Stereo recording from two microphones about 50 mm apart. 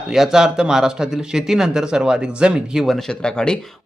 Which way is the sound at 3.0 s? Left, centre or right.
Centre.